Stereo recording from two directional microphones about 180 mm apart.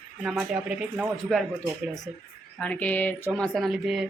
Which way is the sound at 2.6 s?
10° left (ahead or behind).